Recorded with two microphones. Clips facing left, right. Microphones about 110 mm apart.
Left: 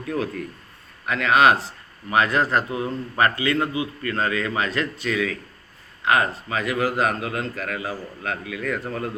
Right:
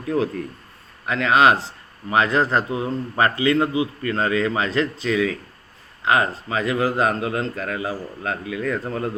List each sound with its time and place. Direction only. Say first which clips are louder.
1.0 s a man's voice: right 1 dB; 25° right (ahead or behind)